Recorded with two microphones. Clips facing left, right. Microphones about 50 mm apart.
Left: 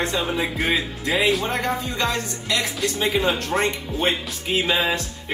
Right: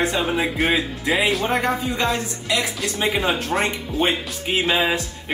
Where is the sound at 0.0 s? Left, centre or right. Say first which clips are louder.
Right 2 dB; centre.